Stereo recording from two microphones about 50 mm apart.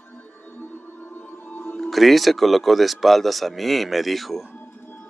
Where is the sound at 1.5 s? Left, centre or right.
Left.